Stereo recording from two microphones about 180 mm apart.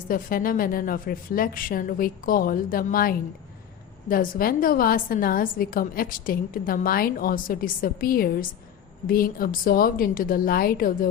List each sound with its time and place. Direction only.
0.1 s a woman's voice: 55° left (ahead or behind)